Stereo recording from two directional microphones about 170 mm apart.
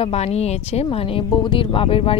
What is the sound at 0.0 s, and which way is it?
Speech, 40° left (ahead or behind).